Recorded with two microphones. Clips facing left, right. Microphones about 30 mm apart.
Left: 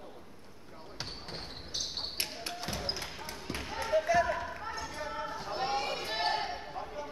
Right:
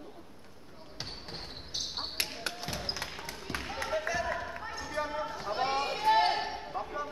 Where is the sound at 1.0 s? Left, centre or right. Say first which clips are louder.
Even; centre.